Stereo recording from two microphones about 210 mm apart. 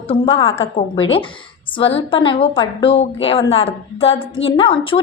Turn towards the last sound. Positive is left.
turn(degrees=25)  # may be behind; listen again after turning